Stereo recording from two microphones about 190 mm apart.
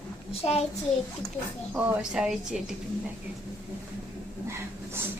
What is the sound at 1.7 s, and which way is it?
Speech, 5° right (ahead or behind).